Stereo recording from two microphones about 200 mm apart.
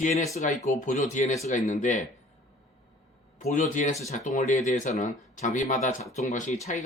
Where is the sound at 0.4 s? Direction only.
40° left (ahead or behind).